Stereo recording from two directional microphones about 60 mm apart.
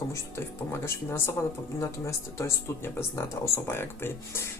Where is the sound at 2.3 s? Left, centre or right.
Left.